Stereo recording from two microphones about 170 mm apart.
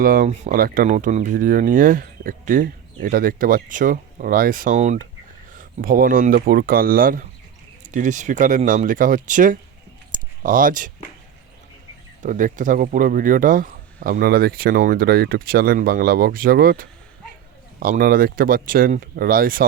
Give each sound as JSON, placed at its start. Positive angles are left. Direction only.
{"t": 0.0, "sound": "speech", "side_deg": -55}
{"t": 5.5, "sound": "speech", "side_deg": -60}
{"t": 10.1, "sound": "a sound", "side_deg": -55}
{"t": 12.2, "sound": "speech", "side_deg": -50}